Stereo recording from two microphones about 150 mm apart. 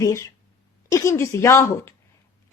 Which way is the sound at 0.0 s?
20° left (ahead or behind).